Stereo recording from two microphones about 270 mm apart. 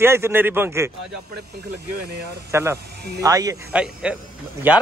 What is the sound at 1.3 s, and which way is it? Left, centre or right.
Speech, right.